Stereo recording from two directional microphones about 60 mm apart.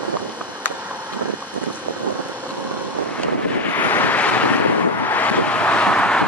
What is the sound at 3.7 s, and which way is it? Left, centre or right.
Waves, left.